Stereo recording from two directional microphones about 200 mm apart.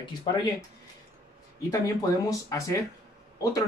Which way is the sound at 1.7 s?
15° left (ahead or behind).